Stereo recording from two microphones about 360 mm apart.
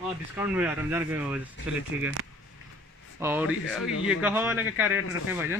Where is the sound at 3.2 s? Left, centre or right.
Centre.